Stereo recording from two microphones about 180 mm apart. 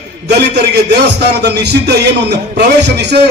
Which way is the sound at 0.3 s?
65° right (ahead or behind).